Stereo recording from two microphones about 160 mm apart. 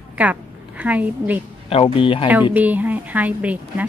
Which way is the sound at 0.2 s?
10° right (ahead or behind).